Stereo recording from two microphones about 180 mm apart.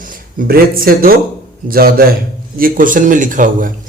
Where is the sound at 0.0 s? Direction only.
50° right (ahead or behind).